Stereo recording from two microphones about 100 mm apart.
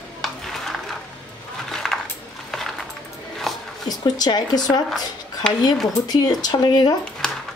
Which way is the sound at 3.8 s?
40° left (ahead or behind).